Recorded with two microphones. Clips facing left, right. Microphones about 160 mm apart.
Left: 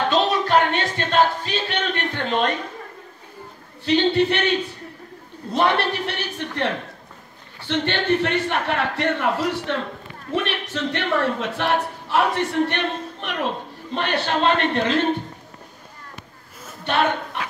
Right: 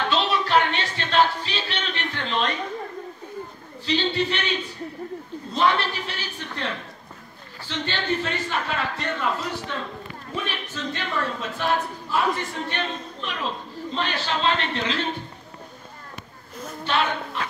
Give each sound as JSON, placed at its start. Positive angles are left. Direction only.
{"t": 0.1, "sound": "music", "side_deg": 45}
{"t": 3.8, "sound": "a man's voice", "side_deg": 55}
{"t": 16.8, "sound": "speech", "side_deg": 55}